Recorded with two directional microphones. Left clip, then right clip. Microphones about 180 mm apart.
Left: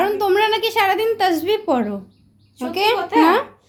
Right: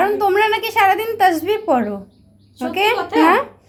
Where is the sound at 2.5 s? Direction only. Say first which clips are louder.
Right 1 dB; 15° left (ahead or behind).